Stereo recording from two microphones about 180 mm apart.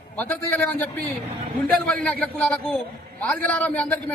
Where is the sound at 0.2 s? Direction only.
10° left (ahead or behind).